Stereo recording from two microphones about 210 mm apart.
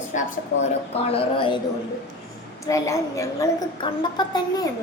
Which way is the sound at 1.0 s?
25° left (ahead or behind).